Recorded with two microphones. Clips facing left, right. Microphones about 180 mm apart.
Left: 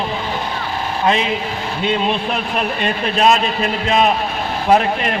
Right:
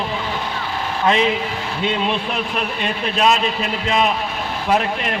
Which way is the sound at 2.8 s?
50° left (ahead or behind).